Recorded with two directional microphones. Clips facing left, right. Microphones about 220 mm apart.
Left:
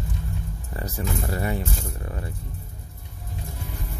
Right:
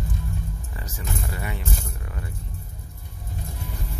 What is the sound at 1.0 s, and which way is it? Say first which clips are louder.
Speech: left 5 dB; 40° left (ahead or behind).